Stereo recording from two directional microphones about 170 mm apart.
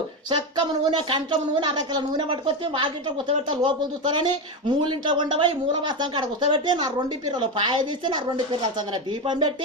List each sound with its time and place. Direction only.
0.3 s speech: 25° right (ahead or behind)